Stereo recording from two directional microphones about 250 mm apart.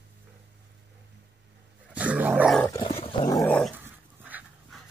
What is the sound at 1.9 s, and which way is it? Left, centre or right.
Dog, centre.